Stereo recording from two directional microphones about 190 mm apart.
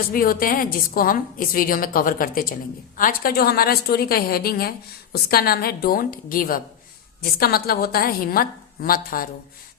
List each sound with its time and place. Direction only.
0.1 s a woman's voice: 50° left (ahead or behind)